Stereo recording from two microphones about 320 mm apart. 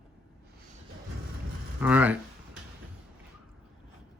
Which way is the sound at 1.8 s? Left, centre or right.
Centre.